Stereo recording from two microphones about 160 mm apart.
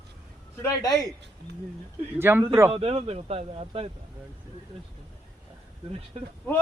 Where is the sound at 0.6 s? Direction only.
20° left (ahead or behind).